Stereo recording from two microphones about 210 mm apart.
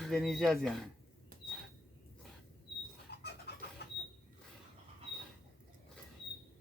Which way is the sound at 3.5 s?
50° left (ahead or behind).